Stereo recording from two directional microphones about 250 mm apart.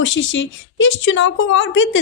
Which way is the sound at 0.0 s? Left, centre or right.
Left.